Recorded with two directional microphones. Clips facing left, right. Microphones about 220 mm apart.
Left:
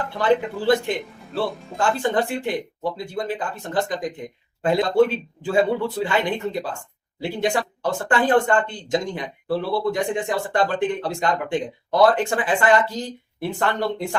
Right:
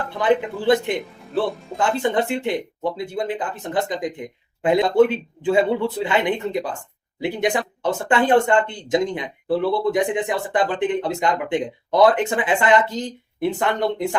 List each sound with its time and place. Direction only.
0.2 s speech: 20° right (ahead or behind)